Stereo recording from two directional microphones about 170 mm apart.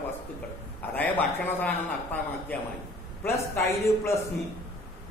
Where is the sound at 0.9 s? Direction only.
10° left (ahead or behind).